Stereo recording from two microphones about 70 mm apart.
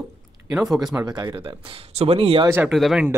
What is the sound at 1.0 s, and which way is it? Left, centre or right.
Speech, right.